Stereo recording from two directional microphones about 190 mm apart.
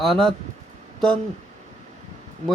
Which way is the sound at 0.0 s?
Centre (ahead or behind).